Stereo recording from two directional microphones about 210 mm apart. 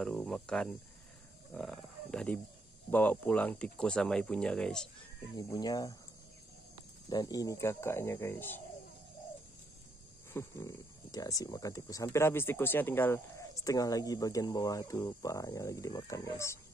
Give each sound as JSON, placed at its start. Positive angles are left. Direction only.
{"t": 0.0, "sound": "speech", "side_deg": 5}
{"t": 1.5, "sound": "a sound", "side_deg": 0}
{"t": 2.9, "sound": "speech", "side_deg": 10}
{"t": 5.3, "sound": "speech", "side_deg": 20}
{"t": 7.1, "sound": "speech", "side_deg": 20}
{"t": 10.3, "sound": "speech", "side_deg": 15}